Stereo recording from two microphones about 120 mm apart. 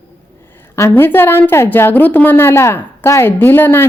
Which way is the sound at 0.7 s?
20° left (ahead or behind).